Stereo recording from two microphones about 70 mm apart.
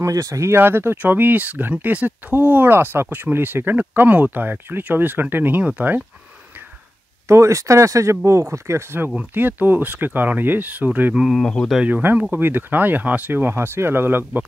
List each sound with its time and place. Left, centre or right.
0.0 s speech: right
0.5 s speech: right
7.2 s speech: right
9.1 s speech: right
11.1 s speech: centre
11.4 s speech: centre
12.0 s speech: right